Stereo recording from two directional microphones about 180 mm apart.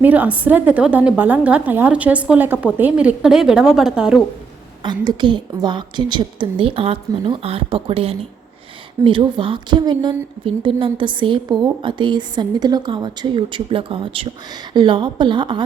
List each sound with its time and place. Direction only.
0.0 s a woman's voice: 10° right (ahead or behind)
4.8 s a woman's voice: 25° right (ahead or behind)